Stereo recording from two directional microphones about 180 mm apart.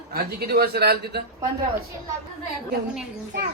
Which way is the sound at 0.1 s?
60° right (ahead or behind).